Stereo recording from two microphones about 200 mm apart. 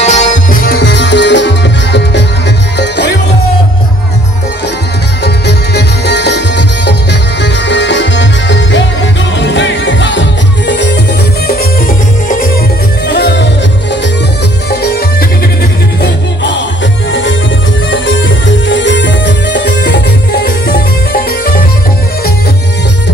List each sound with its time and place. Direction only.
0.0 s music: 35° left (ahead or behind); by 3.2 s 60° left (ahead or behind)
5.2 s music: 55° left (ahead or behind)
13.1 s music: 60° left (ahead or behind)
14.7 s music: 50° left (ahead or behind)
17.1 s music: 70° left (ahead or behind); by 21.6 s 50° left (ahead or behind)